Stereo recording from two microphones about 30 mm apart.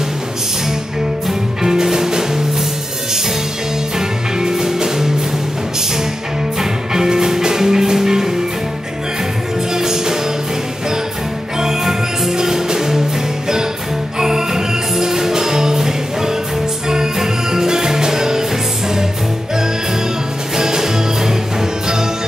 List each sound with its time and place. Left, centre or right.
1.6 s music: centre
4.4 s music: centre
6.6 s music: centre
9.8 s music: centre
11.6 s music: centre
14.2 s music: centre
20.5 s music: centre